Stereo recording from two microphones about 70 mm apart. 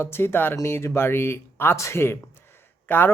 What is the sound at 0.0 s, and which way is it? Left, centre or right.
Speech, left.